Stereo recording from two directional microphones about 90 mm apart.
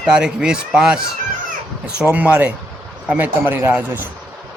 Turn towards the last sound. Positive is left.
turn(degrees=-20)  # may be behind; listen again after turning